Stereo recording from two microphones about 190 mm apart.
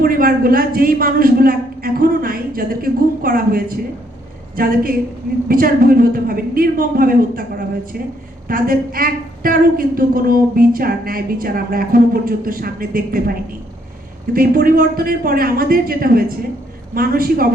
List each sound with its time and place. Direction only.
0.0 s a woman's voice: 50° right (ahead or behind)
8.4 s a woman's voice: 50° right (ahead or behind)
14.3 s a woman's voice: 50° right (ahead or behind)